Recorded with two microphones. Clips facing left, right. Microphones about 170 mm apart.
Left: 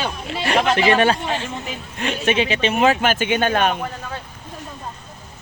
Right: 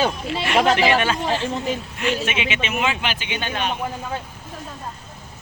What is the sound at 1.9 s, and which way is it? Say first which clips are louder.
Speech: left 8 dB; 35° left (ahead or behind).